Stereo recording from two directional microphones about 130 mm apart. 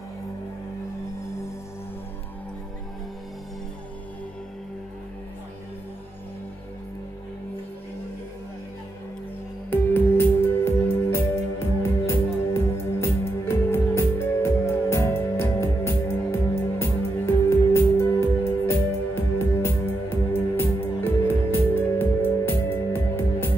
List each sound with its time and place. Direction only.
9.7 s music: 15° left (ahead or behind)